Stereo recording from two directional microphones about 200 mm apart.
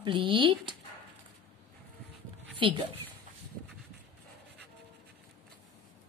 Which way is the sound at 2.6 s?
25° right (ahead or behind).